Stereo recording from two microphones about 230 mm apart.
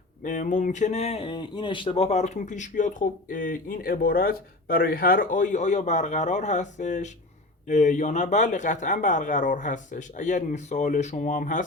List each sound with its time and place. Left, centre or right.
0.2 s speech: left